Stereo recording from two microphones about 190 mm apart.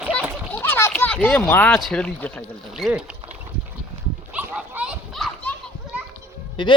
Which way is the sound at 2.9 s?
5° right (ahead or behind).